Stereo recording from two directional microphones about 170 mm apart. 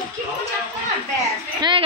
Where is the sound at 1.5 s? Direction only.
25° right (ahead or behind).